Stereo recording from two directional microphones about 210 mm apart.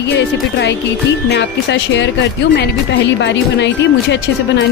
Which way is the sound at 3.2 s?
55° left (ahead or behind).